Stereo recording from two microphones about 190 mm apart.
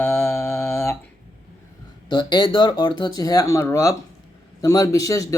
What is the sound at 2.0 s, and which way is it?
Mantra, 25° left (ahead or behind).